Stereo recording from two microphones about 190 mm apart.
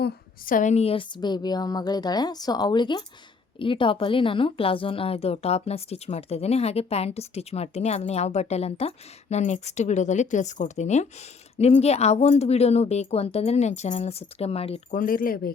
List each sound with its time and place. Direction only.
0.0 s a woman's voice: 45° left (ahead or behind)
14.9 s speech: 45° left (ahead or behind)